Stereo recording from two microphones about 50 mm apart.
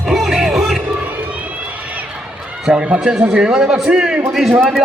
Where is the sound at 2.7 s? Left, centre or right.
Right.